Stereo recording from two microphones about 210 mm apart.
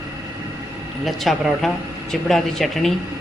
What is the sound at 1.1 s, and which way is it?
A man's voice, centre (ahead or behind).